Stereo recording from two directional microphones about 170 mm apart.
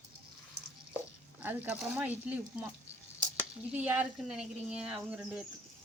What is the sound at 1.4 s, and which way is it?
Speech, 10° right (ahead or behind).